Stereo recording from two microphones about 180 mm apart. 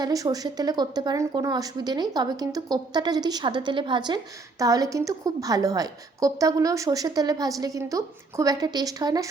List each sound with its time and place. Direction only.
0.0 s speech: 20° right (ahead or behind)